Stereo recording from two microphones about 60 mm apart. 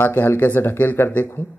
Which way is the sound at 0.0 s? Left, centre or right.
Left.